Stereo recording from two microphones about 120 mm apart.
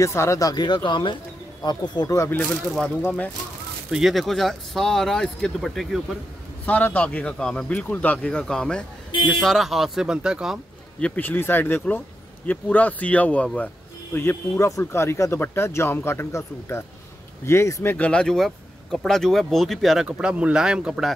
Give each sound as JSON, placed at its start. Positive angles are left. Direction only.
{"t": 0.0, "sound": "speech", "side_deg": 25}
{"t": 3.9, "sound": "speech", "side_deg": 0}
{"t": 6.6, "sound": "speech", "side_deg": 15}
{"t": 11.0, "sound": "speech", "side_deg": 10}
{"t": 14.1, "sound": "speech", "side_deg": 20}
{"t": 17.9, "sound": "speech", "side_deg": 10}